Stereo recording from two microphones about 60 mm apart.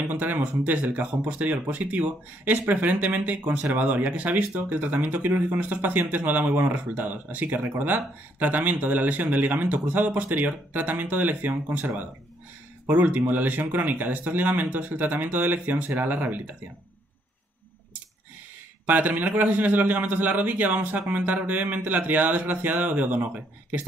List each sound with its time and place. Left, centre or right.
0.0 s speech: right
18.9 s speech: right